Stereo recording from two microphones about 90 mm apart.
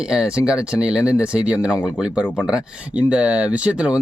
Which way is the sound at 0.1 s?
10° right (ahead or behind).